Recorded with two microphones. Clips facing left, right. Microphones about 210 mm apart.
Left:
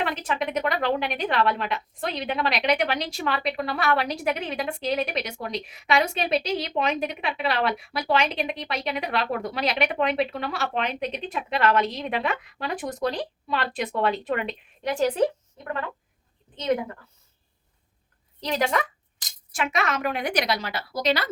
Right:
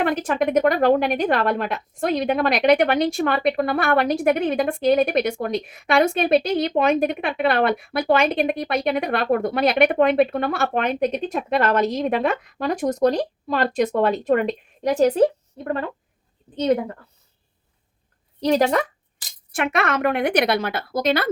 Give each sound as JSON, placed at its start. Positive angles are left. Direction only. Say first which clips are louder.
{"t": 0.0, "sound": "a woman's voice", "louder": "right 7 dB", "side_deg": -50}
{"t": 18.4, "sound": "speech", "louder": "right 7 dB", "side_deg": -40}
{"t": 19.5, "sound": "speech", "louder": "right 4 dB", "side_deg": -60}